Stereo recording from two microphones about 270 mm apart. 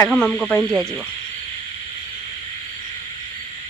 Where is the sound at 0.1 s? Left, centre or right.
Centre.